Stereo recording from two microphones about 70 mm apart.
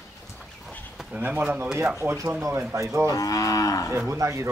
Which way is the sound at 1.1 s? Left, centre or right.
Right.